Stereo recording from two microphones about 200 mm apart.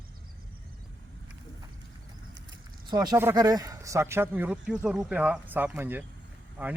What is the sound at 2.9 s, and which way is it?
A man's voice, 20° right (ahead or behind).